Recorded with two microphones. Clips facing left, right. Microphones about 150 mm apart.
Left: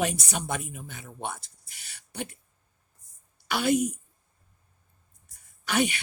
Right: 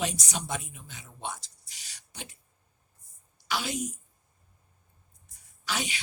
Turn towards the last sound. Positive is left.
turn(degrees=60)  # may be behind; listen again after turning